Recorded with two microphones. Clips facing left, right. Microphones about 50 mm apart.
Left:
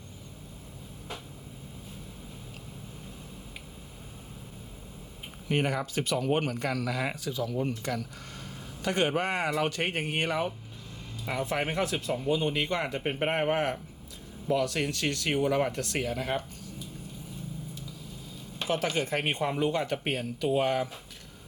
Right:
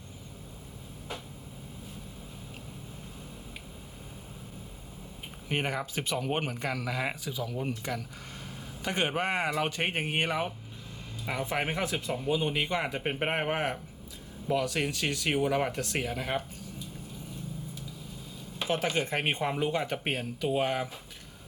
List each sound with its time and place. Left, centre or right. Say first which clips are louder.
5.5 s a man's voice: left 3 dB; centre
18.7 s speech: left 1 dB; centre